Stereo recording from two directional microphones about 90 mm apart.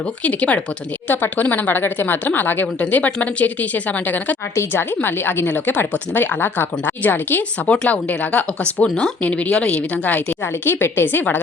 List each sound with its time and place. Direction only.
0.2 s a woman's voice: 15° left (ahead or behind)